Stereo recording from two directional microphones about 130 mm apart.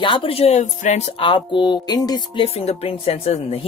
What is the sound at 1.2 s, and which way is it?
Music, 40° left (ahead or behind).